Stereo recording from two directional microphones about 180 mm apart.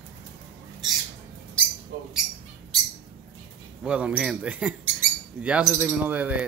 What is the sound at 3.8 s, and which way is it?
Speech, 5° right (ahead or behind).